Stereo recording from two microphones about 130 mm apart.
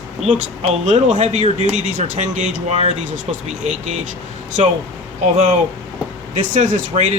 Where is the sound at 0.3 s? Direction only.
60° right (ahead or behind).